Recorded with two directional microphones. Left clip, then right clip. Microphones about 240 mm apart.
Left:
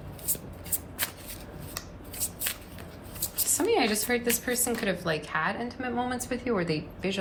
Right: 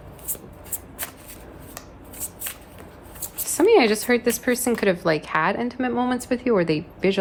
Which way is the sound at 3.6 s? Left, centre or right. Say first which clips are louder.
Right 10 dB; right.